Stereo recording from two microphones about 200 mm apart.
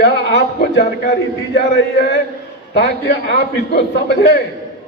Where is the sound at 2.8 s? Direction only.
60° left (ahead or behind).